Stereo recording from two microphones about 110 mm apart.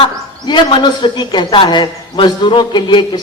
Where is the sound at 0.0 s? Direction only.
50° left (ahead or behind).